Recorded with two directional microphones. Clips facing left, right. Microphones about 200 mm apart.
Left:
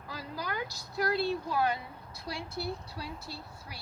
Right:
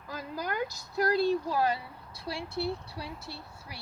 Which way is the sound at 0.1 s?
50° right (ahead or behind).